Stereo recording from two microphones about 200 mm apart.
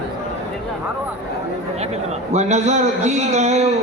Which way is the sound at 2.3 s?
35° right (ahead or behind).